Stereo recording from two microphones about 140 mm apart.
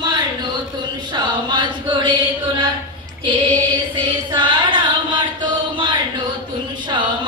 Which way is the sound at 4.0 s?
35° right (ahead or behind).